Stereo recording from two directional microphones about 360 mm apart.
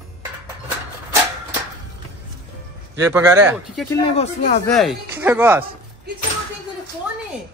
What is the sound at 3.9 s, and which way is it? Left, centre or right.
Speech, centre.